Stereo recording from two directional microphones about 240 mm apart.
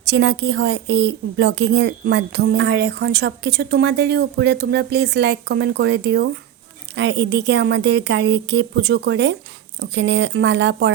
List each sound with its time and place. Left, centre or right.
0.1 s speech: right